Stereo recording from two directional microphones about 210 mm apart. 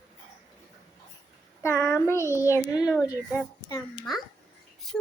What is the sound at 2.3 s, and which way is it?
A woman's voice, 15° left (ahead or behind).